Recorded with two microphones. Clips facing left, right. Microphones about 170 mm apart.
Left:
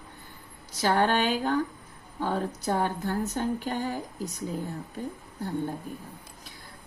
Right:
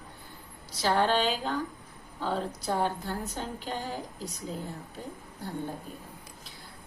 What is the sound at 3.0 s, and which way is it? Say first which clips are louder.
Speech: left 7 dB; 55° left (ahead or behind).